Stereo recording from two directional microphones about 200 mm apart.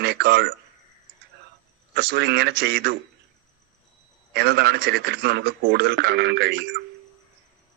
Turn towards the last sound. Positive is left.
turn(degrees=-55)  # may be behind; listen again after turning